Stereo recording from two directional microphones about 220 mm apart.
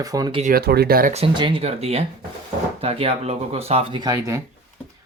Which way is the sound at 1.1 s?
25° right (ahead or behind).